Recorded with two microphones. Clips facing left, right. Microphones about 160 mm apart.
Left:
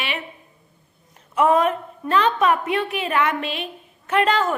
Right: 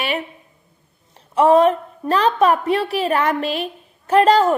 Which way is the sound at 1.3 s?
30° right (ahead or behind).